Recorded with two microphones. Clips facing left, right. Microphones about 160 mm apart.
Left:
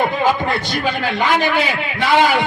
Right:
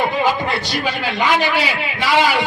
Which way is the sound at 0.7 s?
50° left (ahead or behind).